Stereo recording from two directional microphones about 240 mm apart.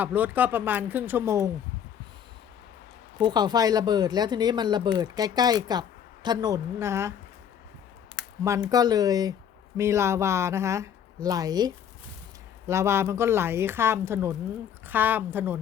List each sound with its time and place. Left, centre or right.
0.0 s speech: centre
3.2 s speech: centre
8.4 s speech: centre